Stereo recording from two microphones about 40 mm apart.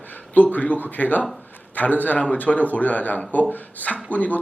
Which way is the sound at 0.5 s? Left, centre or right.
Left.